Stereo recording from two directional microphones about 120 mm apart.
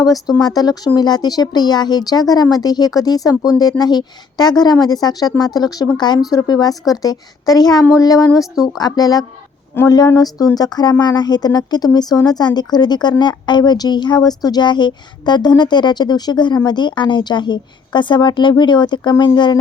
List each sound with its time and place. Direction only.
0.3 s a woman's voice: 35° left (ahead or behind)